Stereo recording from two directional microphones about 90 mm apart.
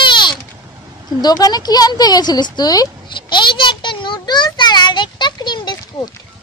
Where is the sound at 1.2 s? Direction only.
45° left (ahead or behind).